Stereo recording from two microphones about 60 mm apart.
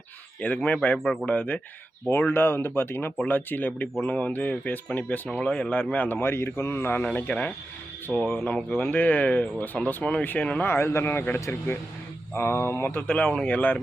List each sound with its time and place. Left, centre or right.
0.4 s speech: left
0.9 s speech: centre
1.2 s speech: left
7.3 s speech: left
8.1 s speech: centre
8.7 s speech: left
10.6 s speech: left
13.1 s speech: left
13.5 s speech: left